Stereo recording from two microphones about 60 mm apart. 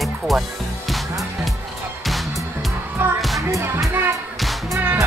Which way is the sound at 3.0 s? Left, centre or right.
Right.